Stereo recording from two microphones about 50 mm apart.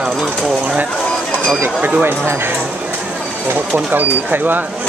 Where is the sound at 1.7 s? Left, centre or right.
Right.